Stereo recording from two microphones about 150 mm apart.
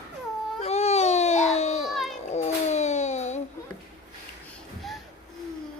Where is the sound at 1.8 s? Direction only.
Centre (ahead or behind).